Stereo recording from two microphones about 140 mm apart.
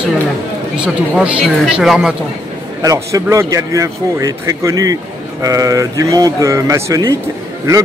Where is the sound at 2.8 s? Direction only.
25° right (ahead or behind).